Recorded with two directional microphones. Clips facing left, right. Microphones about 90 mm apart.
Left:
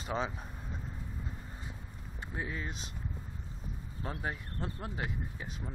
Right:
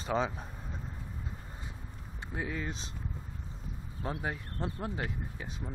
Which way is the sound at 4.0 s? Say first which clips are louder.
Right 4 dB; 20° right (ahead or behind).